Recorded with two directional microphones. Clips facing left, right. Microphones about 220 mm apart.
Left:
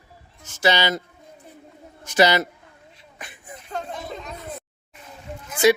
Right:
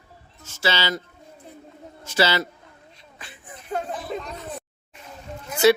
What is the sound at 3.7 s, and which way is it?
Children playing, 10° right (ahead or behind).